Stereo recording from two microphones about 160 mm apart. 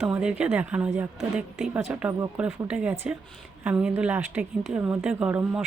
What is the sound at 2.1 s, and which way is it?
Speech, 20° right (ahead or behind).